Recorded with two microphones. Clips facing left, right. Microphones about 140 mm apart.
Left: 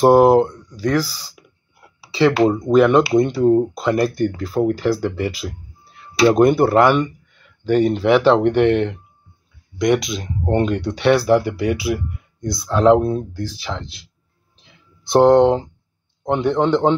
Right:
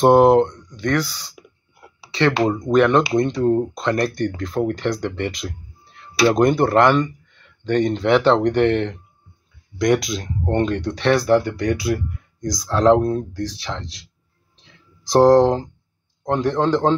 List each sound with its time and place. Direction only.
0.0 s speech: 5° left (ahead or behind)
1.0 s speech: 35° left (ahead or behind)
2.0 s a sound: 5° left (ahead or behind)
2.5 s speech: 5° left (ahead or behind)
14.6 s a sound: 5° left (ahead or behind)
16.4 s speech: 10° left (ahead or behind)